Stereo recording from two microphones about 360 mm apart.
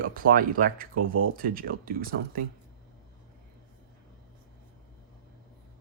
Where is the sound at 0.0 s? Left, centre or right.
Right.